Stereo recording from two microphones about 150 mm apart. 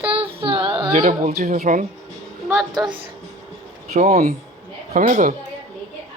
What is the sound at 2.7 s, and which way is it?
Speech, 30° right (ahead or behind).